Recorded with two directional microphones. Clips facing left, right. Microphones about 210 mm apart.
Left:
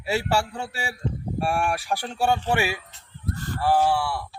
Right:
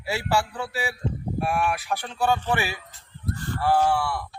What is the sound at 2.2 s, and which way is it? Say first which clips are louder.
Speech: left 1 dB; 10° left (ahead or behind).